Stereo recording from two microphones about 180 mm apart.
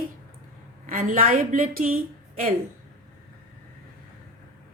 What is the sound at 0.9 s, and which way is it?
A woman's voice, 45° right (ahead or behind).